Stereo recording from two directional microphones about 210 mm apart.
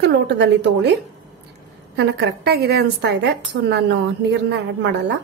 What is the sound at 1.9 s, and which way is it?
A woman's voice, 55° right (ahead or behind).